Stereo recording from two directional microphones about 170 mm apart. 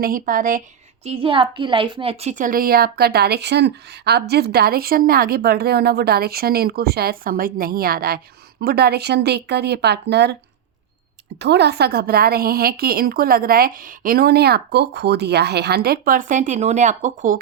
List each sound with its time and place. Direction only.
0.0 s speech: 55° right (ahead or behind)
1.0 s a woman's voice: 35° right (ahead or behind); by 10.3 s 80° right
11.3 s a woman's voice: 85° right; by 17.4 s 50° right (ahead or behind)